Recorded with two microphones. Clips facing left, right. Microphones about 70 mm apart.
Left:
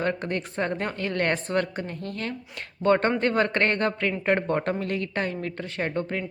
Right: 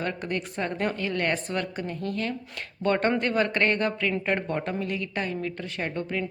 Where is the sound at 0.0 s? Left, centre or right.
Left.